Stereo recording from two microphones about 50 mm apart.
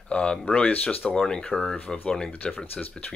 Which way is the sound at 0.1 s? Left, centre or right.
Left.